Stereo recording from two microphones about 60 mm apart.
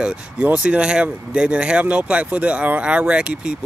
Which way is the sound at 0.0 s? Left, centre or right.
Centre.